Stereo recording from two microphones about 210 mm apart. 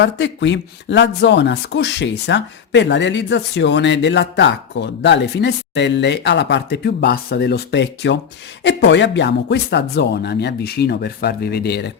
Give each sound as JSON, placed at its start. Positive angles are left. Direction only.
{"t": 0.0, "sound": "speech", "side_deg": 60}